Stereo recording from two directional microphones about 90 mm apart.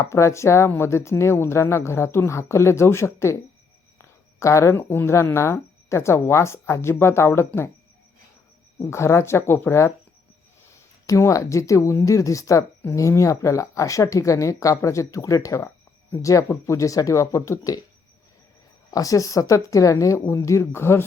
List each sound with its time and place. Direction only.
0.0 s speech: 30° left (ahead or behind)
4.4 s speech: 35° left (ahead or behind)
8.8 s speech: 30° left (ahead or behind)
11.0 s speech: 35° left (ahead or behind)
18.9 s speech: 40° left (ahead or behind)